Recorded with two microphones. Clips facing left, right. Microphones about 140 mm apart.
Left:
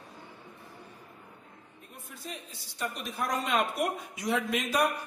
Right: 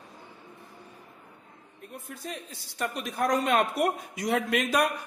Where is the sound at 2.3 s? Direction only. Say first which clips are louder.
Right 4 dB; 65° right (ahead or behind).